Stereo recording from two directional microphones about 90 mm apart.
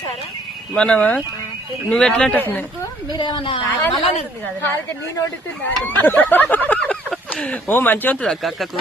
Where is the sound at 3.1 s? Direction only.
60° left (ahead or behind); by 4.1 s 85° left.